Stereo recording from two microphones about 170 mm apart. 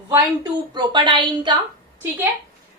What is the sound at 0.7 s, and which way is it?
Speech, 30° right (ahead or behind).